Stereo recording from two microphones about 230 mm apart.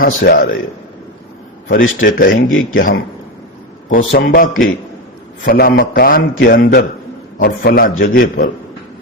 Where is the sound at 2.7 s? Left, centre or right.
Left.